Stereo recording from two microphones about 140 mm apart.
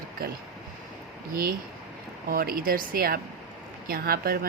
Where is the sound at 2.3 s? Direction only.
90° right.